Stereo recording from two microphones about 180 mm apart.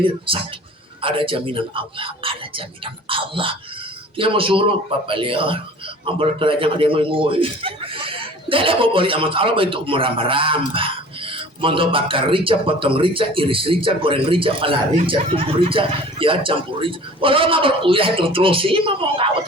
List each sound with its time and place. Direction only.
0.3 s speech: 30° right (ahead or behind)